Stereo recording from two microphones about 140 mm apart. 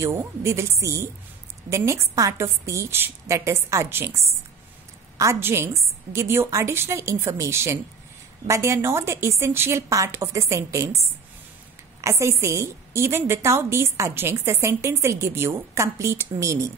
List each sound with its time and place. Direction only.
0.0 s a woman's voice: 20° right (ahead or behind)
12.0 s a woman's voice: 20° right (ahead or behind)